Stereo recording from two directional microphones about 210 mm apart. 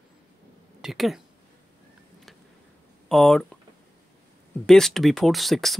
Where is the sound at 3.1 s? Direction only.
Centre (ahead or behind).